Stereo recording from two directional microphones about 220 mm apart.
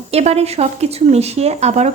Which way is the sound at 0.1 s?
30° right (ahead or behind).